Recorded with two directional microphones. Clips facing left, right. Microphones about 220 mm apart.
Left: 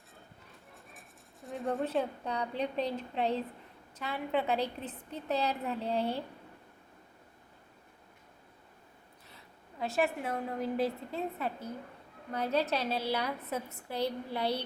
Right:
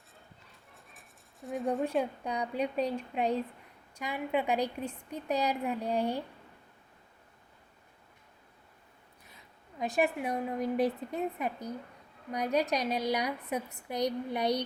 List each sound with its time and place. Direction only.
0.9 s a sound: centre (ahead or behind)
1.8 s a woman's voice: 10° right (ahead or behind)
9.3 s a woman's voice: 15° right (ahead or behind)